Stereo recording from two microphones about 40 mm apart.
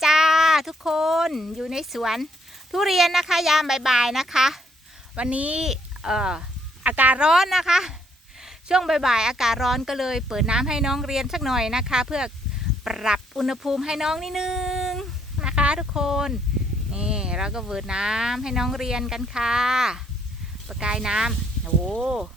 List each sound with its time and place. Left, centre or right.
0.0 s a sound: centre
2.7 s speech: centre
5.1 s speech: right
5.6 s speech: centre
6.8 s speech: right
7.2 s speech: centre
9.6 s speech: centre
14.3 s music: centre
15.4 s a sound: right
16.0 s speech: centre